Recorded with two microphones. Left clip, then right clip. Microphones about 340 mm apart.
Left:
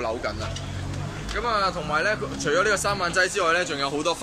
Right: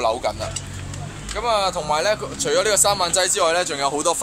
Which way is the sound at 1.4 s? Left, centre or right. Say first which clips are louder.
Right 4 dB; centre.